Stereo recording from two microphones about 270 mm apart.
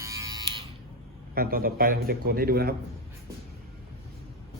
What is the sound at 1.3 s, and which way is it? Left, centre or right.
A man's voice, right.